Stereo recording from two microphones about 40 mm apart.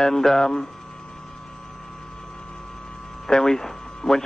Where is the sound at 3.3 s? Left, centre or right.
Centre.